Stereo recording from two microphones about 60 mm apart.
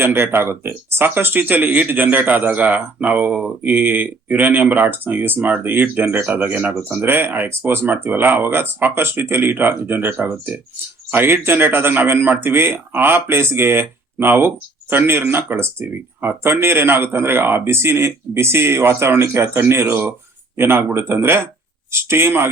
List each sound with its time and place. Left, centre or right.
0.0 s a man's voice: right